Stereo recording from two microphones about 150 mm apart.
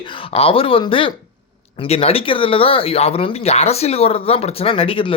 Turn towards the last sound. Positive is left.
turn(degrees=35)  # may be behind; listen again after turning